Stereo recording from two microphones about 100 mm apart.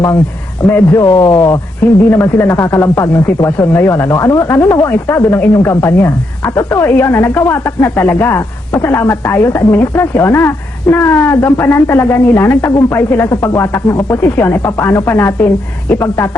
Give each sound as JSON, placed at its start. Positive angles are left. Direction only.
{"t": 0.6, "sound": "a man's voice", "side_deg": 10}
{"t": 1.0, "sound": "speech", "side_deg": 35}